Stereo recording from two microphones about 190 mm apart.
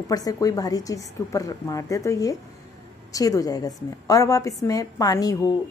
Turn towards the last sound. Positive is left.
turn(degrees=20)  # may be behind; listen again after turning